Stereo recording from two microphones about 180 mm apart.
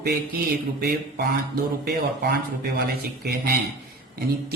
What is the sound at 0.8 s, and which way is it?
Speech, 60° right (ahead or behind).